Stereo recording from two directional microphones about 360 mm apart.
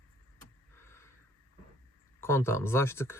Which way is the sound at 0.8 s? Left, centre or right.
Centre.